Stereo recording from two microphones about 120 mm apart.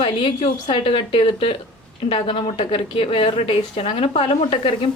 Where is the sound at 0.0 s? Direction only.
45° left (ahead or behind).